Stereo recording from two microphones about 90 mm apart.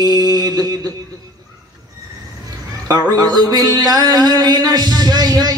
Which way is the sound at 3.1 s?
45° right (ahead or behind).